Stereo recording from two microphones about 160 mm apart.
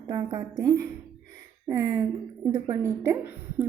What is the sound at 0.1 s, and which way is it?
A woman's voice, 25° right (ahead or behind).